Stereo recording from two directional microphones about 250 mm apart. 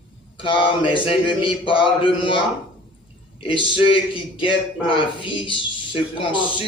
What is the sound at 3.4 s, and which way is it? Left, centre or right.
Speech, centre.